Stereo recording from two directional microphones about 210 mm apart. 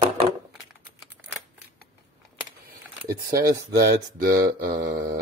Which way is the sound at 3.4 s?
15° right (ahead or behind).